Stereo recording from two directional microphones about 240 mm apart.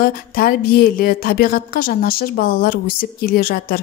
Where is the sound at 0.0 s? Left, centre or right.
Left.